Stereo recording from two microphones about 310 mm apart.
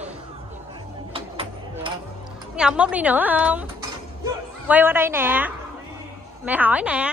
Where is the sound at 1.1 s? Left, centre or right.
Centre.